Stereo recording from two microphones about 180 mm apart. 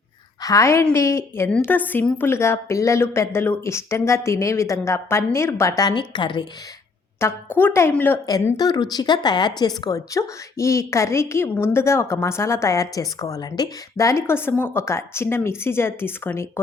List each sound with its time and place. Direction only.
0.4 s speech: 15° left (ahead or behind)
7.2 s speech: 15° left (ahead or behind)